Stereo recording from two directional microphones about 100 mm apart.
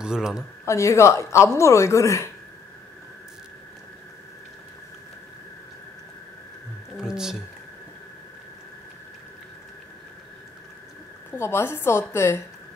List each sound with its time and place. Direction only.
0.0 s speech: 5° right (ahead or behind)
0.7 s a woman's voice: 30° left (ahead or behind)
7.0 s speech: 5° right (ahead or behind)
11.3 s a woman's voice: 25° left (ahead or behind)